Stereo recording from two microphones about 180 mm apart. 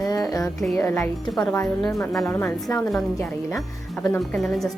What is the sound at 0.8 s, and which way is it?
Speech, 15° left (ahead or behind).